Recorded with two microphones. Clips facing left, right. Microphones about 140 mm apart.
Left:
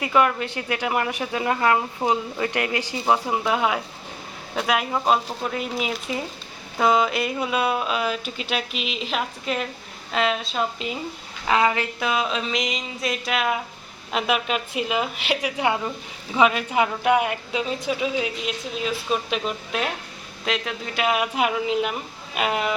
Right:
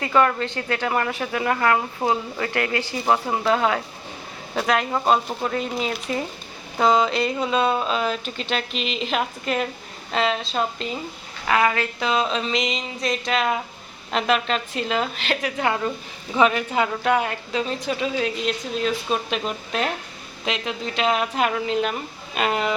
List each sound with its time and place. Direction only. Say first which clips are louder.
0.0 s speech: right 1 dB; 10° left (ahead or behind)
11.4 s speech: even; 20° left (ahead or behind)
11.9 s speech: right 2 dB; 5° left (ahead or behind)